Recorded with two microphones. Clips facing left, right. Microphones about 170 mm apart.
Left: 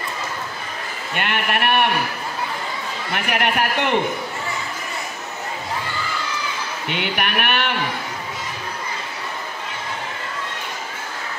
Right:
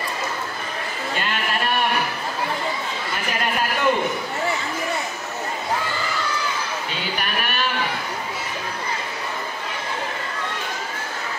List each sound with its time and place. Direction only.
1.1 s a man's voice: 65° left (ahead or behind)
3.1 s a man's voice: 70° left (ahead or behind)
6.9 s a man's voice: 65° left (ahead or behind)